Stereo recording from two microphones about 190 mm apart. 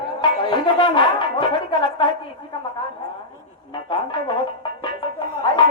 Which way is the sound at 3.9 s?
25° left (ahead or behind).